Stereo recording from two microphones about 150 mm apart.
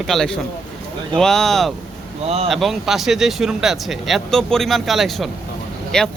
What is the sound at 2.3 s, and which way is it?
Speech, 45° right (ahead or behind).